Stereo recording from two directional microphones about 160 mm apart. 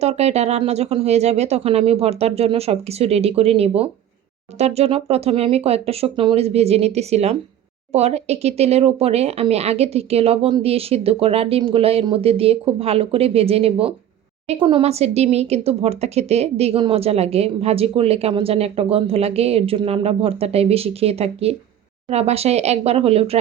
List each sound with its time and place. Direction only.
0.0 s speech: 40° right (ahead or behind)